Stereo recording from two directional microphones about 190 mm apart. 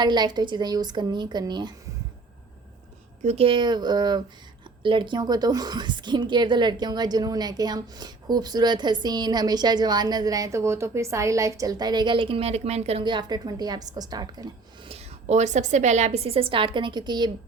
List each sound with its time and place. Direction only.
0.0 s a woman's voice: 25° right (ahead or behind)
3.2 s a woman's voice: 30° right (ahead or behind)
14.8 s a woman's voice: 35° right (ahead or behind)